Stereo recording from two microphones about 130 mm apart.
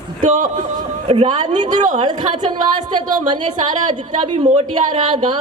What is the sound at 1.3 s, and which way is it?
Speech, 65° right (ahead or behind).